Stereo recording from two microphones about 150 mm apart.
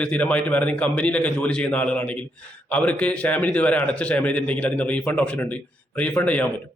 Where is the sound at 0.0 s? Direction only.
10° left (ahead or behind).